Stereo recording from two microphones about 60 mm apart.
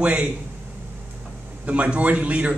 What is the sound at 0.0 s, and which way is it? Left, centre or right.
Speech, right.